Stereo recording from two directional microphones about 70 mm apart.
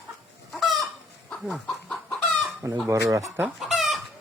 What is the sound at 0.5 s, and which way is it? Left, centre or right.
Fowl, centre.